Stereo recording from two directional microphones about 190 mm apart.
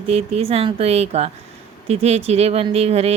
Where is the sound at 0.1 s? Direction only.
30° right (ahead or behind).